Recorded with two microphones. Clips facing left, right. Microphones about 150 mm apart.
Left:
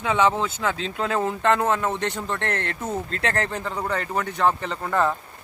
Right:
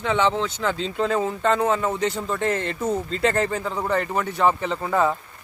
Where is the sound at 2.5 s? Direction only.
60° left (ahead or behind).